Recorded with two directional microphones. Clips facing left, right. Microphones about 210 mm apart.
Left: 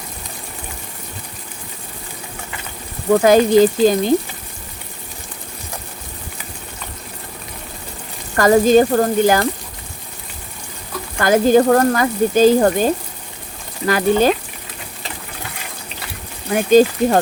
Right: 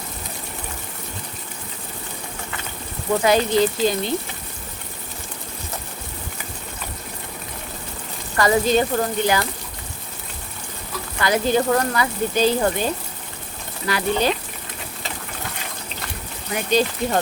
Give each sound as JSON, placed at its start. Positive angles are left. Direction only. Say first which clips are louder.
{"t": 3.1, "sound": "speech", "louder": "left 7 dB", "side_deg": 45}
{"t": 8.4, "sound": "speech", "louder": "left 7 dB", "side_deg": 45}
{"t": 11.2, "sound": "speech", "louder": "left 7 dB", "side_deg": 45}
{"t": 16.5, "sound": "speech", "louder": "left 9 dB", "side_deg": 45}